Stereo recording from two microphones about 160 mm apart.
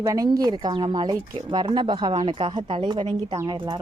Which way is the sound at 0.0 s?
20° right (ahead or behind).